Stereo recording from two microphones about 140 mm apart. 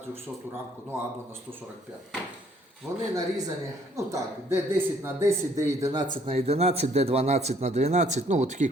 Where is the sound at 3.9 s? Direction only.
20° right (ahead or behind).